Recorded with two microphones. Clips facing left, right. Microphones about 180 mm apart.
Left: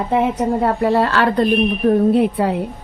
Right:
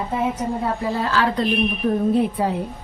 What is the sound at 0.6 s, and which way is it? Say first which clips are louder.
A woman's voice: left 10 dB; 70° left (ahead or behind).